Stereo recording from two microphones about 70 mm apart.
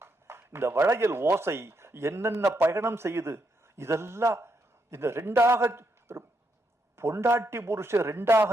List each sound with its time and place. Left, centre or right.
0.0 s a man's voice: right